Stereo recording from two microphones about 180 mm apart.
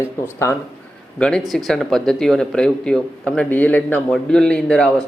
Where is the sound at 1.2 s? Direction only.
Centre (ahead or behind).